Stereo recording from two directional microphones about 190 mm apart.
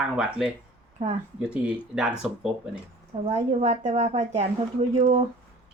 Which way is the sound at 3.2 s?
35° right (ahead or behind).